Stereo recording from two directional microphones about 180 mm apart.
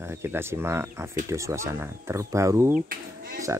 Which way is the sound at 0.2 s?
15° right (ahead or behind).